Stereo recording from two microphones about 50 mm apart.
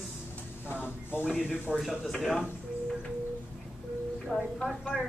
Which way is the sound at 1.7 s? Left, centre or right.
Centre.